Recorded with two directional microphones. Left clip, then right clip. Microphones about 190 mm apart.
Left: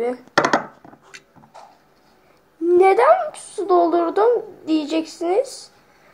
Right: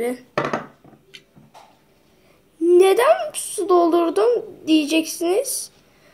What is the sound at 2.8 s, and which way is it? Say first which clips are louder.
Speech: left 4 dB; 60° right (ahead or behind).